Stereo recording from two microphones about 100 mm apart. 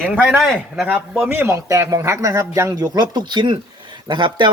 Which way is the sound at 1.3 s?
25° right (ahead or behind).